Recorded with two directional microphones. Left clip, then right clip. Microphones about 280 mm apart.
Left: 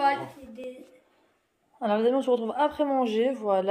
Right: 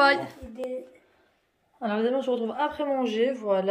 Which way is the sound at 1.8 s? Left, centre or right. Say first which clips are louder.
Left 2 dB; centre.